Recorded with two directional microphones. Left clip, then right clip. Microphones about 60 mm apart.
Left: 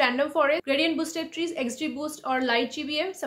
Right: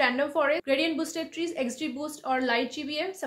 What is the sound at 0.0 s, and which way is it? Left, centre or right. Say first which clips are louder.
A woman's voice: left 2 dB; left.